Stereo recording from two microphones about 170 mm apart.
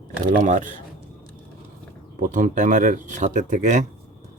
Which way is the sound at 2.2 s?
50° right (ahead or behind).